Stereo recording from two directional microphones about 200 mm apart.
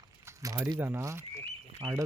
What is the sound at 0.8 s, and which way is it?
Speech, 10° right (ahead or behind).